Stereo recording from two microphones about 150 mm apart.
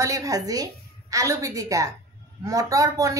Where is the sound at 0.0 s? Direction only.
20° right (ahead or behind).